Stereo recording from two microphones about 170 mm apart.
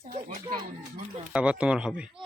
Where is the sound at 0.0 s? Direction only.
45° right (ahead or behind).